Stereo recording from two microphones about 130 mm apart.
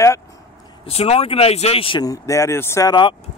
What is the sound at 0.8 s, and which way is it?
Speech, 50° left (ahead or behind).